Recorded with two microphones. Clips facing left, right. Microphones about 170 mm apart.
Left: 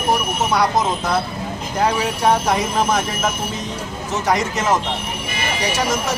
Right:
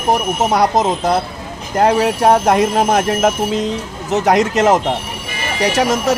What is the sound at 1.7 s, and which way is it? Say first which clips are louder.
Speech: right 7 dB; 55° right (ahead or behind).